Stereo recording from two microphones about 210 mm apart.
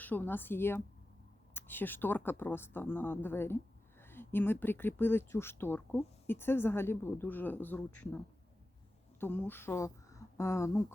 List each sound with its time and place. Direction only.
0.0 s speech: 10° left (ahead or behind)
9.2 s speech: 10° left (ahead or behind)